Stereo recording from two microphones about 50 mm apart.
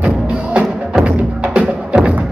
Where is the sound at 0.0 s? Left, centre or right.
Right.